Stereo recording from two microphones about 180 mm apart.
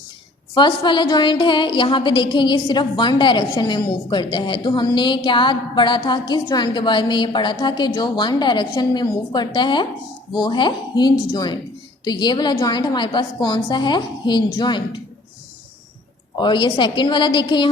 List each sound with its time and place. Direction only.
0.5 s a woman's voice: 25° left (ahead or behind)
16.4 s a woman's voice: 25° left (ahead or behind)